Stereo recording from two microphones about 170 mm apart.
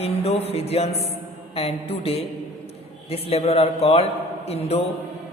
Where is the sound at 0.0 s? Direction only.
35° left (ahead or behind).